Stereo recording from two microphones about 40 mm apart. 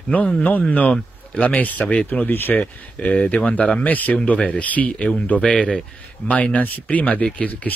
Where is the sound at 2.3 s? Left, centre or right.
Left.